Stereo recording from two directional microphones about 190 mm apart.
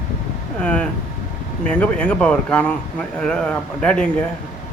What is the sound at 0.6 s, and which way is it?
A man's voice, 5° left (ahead or behind).